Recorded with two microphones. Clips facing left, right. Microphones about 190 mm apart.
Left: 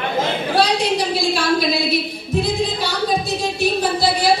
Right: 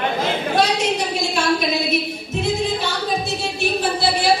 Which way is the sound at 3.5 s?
40° left (ahead or behind).